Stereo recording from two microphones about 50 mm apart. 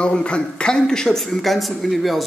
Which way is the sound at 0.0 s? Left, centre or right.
Left.